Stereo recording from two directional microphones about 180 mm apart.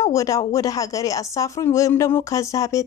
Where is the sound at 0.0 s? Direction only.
20° left (ahead or behind).